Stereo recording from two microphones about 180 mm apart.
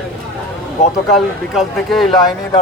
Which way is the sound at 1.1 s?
Centre (ahead or behind).